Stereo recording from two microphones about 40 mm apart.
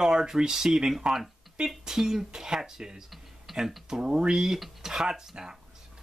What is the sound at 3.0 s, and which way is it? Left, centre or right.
Tick-tock, centre.